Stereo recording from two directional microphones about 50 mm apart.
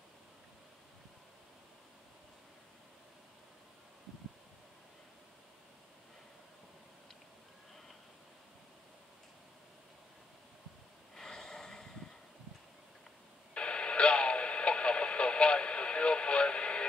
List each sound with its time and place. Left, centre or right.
11.1 s snort: centre
13.6 s radio: left